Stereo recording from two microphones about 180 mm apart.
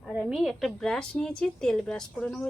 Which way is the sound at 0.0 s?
5° right (ahead or behind).